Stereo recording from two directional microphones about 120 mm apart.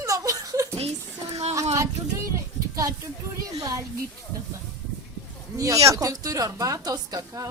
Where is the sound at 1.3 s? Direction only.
65° right (ahead or behind).